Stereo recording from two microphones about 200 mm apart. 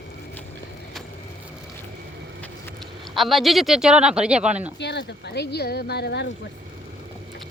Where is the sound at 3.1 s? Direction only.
Centre (ahead or behind).